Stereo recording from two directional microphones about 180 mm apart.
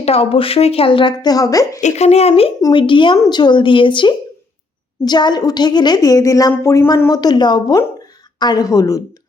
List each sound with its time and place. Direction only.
0.0 s a woman's voice: 35° left (ahead or behind)
1.8 s a woman's voice: 35° left (ahead or behind); by 9.0 s 20° left (ahead or behind)